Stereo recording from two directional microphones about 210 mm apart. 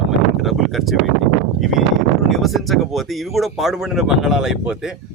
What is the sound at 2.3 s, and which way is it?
Speech, centre (ahead or behind).